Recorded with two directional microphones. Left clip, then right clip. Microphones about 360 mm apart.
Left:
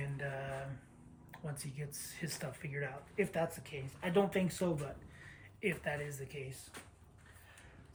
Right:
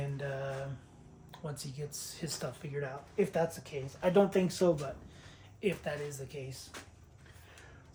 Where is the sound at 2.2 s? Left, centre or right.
Centre.